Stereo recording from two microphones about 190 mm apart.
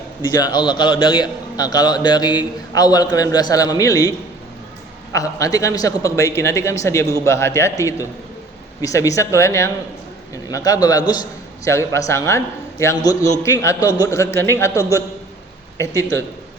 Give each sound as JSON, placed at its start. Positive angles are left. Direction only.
{"t": 0.3, "sound": "a man's voice", "side_deg": 20}
{"t": 5.1, "sound": "a man's voice", "side_deg": 20}